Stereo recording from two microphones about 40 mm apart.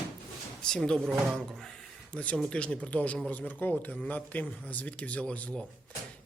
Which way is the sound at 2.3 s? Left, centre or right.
Left.